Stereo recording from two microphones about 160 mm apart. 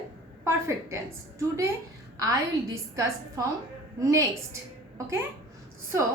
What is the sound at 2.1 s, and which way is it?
A woman's voice, 20° right (ahead or behind).